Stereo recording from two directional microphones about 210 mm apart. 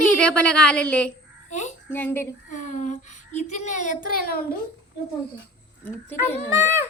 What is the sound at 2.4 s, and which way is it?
Speech, 35° left (ahead or behind).